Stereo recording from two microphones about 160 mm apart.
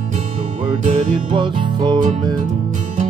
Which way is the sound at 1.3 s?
30° right (ahead or behind).